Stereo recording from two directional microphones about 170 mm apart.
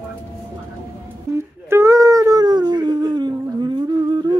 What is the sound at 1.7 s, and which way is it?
Howl, 15° right (ahead or behind).